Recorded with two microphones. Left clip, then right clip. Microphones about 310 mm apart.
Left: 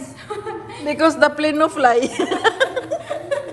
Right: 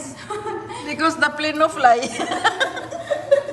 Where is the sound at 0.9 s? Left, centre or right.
Centre.